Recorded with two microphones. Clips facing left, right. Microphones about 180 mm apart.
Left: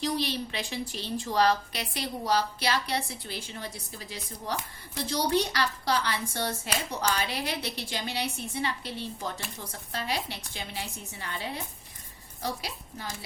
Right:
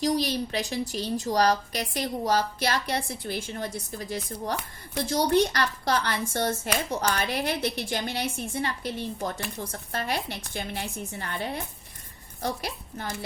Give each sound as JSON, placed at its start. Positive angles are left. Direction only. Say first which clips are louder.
{"t": 0.0, "sound": "a woman's voice", "louder": "right 4 dB", "side_deg": -40}